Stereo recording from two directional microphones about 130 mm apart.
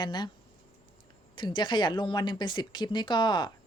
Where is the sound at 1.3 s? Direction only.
35° left (ahead or behind).